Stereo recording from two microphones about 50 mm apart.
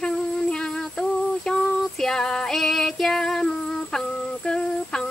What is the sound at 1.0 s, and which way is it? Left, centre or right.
Music, centre.